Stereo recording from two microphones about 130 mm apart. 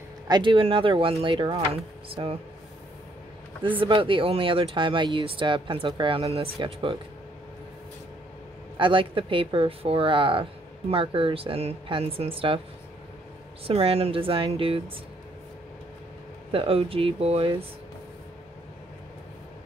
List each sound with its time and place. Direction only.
0.3 s speech: 40° right (ahead or behind)
3.8 s speech: 40° right (ahead or behind)
8.7 s speech: 40° right (ahead or behind)
13.7 s speech: 50° right (ahead or behind)
16.5 s speech: 45° right (ahead or behind)